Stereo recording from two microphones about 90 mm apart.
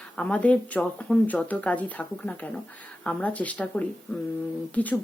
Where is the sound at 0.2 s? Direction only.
15° left (ahead or behind).